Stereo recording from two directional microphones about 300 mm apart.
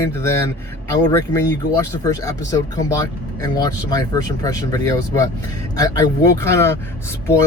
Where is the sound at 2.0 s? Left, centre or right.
Centre.